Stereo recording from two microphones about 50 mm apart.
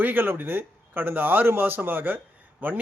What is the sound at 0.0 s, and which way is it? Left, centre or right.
A man's voice, right.